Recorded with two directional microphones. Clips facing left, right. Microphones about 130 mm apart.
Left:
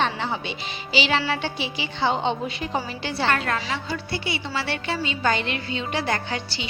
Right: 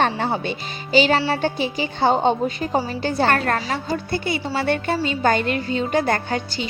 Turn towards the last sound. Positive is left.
turn(degrees=-45)  # may be behind; listen again after turning